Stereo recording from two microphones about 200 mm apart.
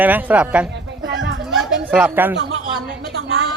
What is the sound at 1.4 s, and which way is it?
Chatter, centre (ahead or behind).